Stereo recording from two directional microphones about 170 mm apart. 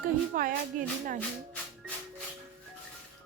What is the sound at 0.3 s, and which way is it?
Speech, 50° right (ahead or behind).